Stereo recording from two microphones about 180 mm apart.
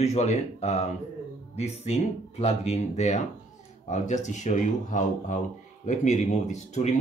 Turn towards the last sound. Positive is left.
turn(degrees=40)  # may be behind; listen again after turning